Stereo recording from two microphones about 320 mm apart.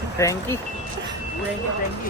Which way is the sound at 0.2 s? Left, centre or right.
Centre.